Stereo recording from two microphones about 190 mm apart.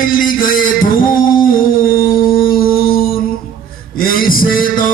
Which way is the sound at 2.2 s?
50° left (ahead or behind).